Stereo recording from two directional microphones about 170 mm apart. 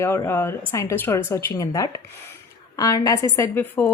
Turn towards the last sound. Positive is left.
turn(degrees=10)  # may be behind; listen again after turning